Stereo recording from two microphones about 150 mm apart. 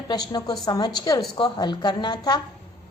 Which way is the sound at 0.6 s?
25° left (ahead or behind).